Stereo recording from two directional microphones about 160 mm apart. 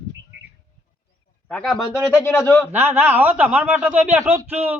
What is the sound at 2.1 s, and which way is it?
Speech, 15° left (ahead or behind).